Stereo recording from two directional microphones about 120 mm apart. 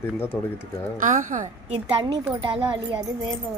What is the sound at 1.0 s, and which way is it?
Speech, 90° right.